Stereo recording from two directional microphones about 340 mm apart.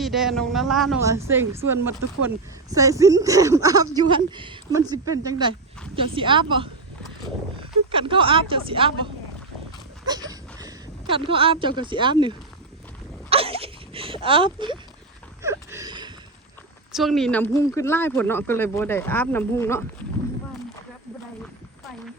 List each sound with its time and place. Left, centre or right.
0.0 s speech: centre
7.9 s speech: centre
10.1 s a sound: centre
11.6 s speech: centre
13.3 s speech: centre
15.4 s a sound: centre
16.9 s speech: centre